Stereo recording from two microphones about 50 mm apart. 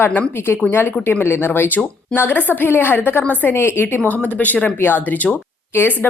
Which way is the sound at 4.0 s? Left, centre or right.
Left.